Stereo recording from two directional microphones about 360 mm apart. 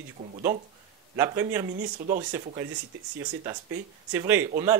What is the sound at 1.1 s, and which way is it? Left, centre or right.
Speech, centre.